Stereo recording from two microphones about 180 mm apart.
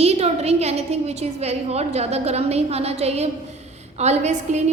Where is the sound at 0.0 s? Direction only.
35° right (ahead or behind).